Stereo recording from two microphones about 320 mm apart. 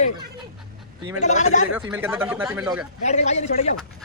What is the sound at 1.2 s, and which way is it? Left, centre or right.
Speech, left.